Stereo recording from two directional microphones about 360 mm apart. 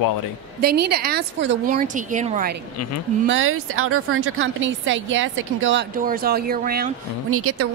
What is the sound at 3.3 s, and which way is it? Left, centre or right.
Speech, right.